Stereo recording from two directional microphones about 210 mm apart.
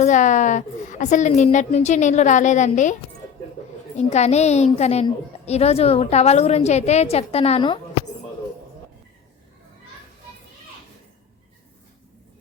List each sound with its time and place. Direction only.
0.0 s a woman's voice: 35° left (ahead or behind)
3.9 s a woman's voice: 30° left (ahead or behind)